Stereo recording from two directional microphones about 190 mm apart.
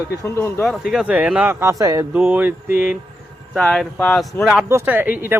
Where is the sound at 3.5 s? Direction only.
5° left (ahead or behind).